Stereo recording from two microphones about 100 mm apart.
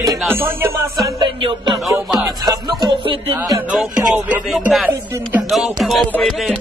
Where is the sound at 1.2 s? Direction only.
55° right (ahead or behind).